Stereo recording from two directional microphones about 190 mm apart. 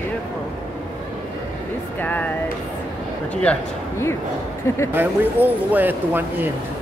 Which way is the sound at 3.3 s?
5° left (ahead or behind).